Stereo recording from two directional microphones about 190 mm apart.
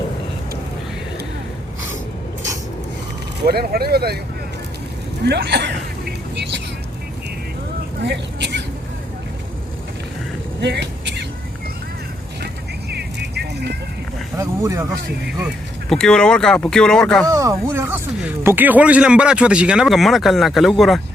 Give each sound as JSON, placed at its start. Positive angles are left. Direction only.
{"t": 3.4, "sound": "speech", "side_deg": -55}
{"t": 5.2, "sound": "speech", "side_deg": -60}
{"t": 8.0, "sound": "a sound", "side_deg": -65}
{"t": 10.6, "sound": "vehicle", "side_deg": -65}
{"t": 12.9, "sound": "vehicle", "side_deg": -60}
{"t": 14.3, "sound": "speech", "side_deg": -15}
{"t": 15.4, "sound": "speech", "side_deg": 0}
{"t": 17.2, "sound": "speech", "side_deg": -15}